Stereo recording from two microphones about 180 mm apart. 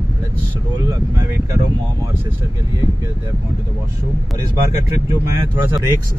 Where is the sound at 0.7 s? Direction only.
20° right (ahead or behind).